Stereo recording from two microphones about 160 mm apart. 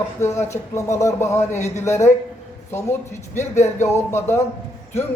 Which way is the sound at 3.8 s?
15° left (ahead or behind).